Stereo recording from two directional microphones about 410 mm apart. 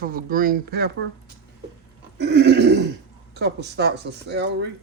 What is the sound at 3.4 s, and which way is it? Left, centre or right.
Speech, right.